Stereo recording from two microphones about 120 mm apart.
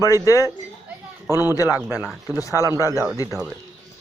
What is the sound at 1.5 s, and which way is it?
Speech, 25° left (ahead or behind).